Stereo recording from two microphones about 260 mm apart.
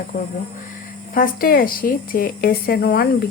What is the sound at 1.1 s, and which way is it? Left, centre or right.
Speech, left.